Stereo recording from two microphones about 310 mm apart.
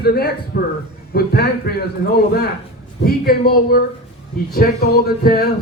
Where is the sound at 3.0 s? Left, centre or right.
Left.